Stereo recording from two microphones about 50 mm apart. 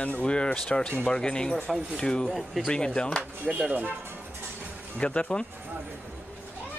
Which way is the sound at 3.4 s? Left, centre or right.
Right.